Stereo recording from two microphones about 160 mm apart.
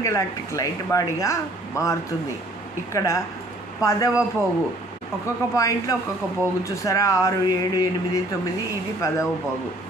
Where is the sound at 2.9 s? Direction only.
20° left (ahead or behind).